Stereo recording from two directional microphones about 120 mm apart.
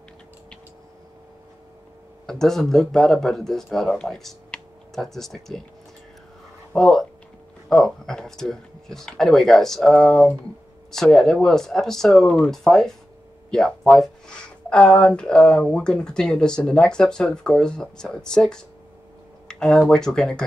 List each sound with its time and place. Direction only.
2.2 s speech: 5° left (ahead or behind)
6.7 s speech: 5° left (ahead or behind)